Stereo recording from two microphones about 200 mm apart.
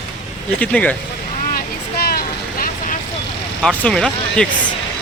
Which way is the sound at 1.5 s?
50° left (ahead or behind).